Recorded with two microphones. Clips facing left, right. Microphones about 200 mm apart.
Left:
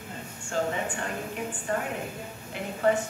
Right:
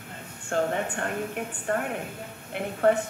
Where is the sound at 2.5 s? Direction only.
60° right (ahead or behind).